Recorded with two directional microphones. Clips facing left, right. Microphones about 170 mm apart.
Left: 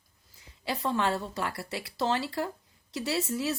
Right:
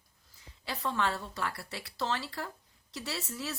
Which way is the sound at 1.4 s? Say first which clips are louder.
Left 4 dB; 15° left (ahead or behind).